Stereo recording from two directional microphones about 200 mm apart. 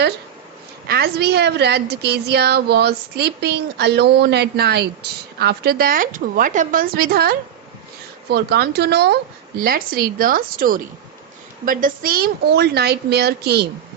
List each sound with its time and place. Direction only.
0.9 s a woman's voice: 50° right (ahead or behind)